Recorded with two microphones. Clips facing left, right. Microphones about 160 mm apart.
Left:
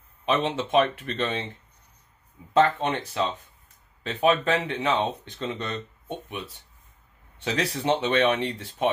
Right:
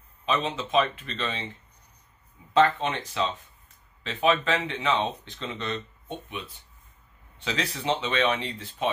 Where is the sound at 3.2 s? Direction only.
45° left (ahead or behind).